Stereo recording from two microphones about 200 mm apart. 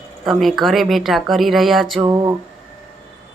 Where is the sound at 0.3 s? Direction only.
Centre (ahead or behind).